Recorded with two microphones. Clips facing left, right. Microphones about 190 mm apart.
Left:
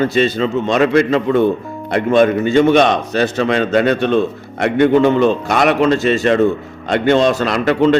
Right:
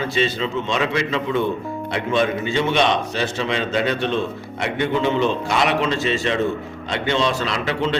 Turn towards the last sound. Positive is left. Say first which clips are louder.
# left 9 dB
turn(degrees=50)  # may be behind; listen again after turning